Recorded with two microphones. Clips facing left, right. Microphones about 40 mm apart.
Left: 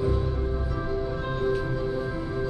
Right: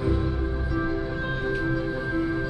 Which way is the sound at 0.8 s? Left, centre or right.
Right.